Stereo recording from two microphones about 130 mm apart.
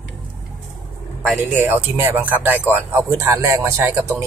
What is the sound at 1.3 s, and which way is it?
Speech, 15° right (ahead or behind).